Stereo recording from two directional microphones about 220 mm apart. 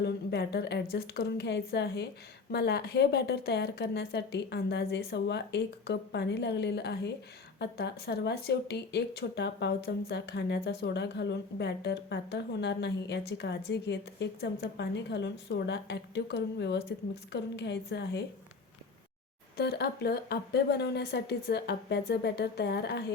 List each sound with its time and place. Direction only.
0.0 s speech: 45° left (ahead or behind)
19.5 s speech: 45° left (ahead or behind)